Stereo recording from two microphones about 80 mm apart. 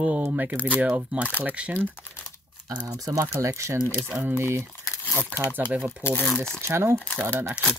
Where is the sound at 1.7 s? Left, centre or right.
Left.